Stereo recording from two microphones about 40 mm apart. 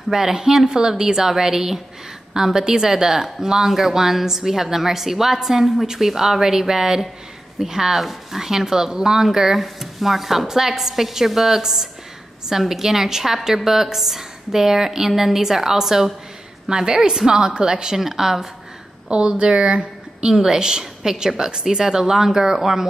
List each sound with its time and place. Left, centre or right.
0.1 s speech: centre
19.0 s a woman's voice: right
20.3 s speech: centre